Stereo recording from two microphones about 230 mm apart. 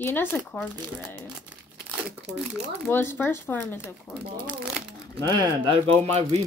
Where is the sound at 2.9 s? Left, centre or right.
Centre.